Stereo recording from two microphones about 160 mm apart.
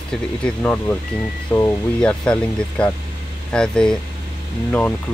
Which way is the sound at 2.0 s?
5° left (ahead or behind).